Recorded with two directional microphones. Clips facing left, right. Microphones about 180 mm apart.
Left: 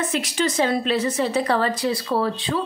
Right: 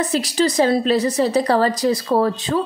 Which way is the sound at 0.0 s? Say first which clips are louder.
Right 4 dB; 35° right (ahead or behind).